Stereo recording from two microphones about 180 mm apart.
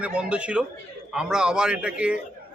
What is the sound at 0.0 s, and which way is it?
A man's voice, 5° right (ahead or behind).